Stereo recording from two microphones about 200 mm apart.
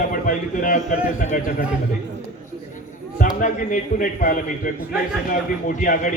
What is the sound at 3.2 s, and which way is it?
A man's voice, 40° left (ahead or behind).